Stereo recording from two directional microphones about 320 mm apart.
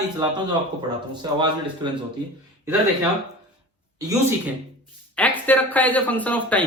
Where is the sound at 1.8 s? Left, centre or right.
Centre.